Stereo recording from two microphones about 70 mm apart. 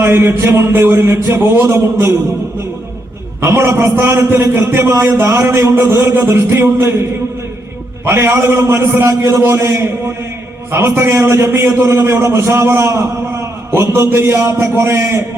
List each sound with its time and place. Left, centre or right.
0.0 s a man's voice: right
3.4 s a man's voice: right
8.0 s a man's voice: right